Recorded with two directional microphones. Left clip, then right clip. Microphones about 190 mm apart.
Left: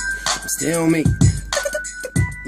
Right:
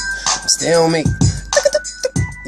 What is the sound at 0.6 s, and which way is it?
Speech, 5° left (ahead or behind).